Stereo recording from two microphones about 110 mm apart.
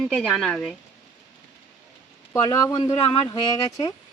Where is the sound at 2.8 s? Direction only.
30° left (ahead or behind).